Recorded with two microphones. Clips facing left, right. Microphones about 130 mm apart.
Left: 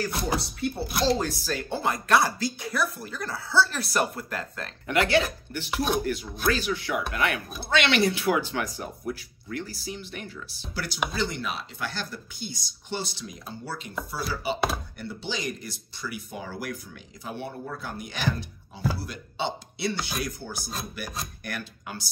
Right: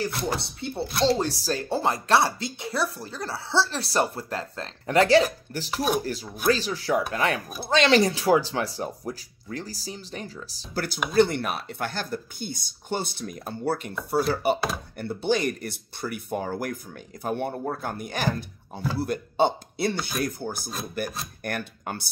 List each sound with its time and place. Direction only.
0.0 s speech: 25° right (ahead or behind); by 11.0 s 45° right (ahead or behind)
11.1 s speech: 55° right (ahead or behind)